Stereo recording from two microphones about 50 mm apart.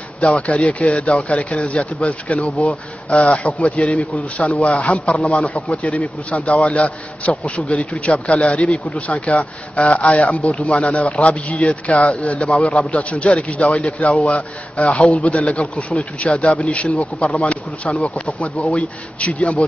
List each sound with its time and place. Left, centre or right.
0.7 s a man's voice: left